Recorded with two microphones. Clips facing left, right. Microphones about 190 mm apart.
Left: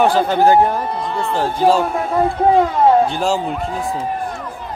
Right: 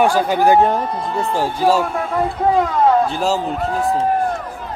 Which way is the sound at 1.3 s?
10° right (ahead or behind).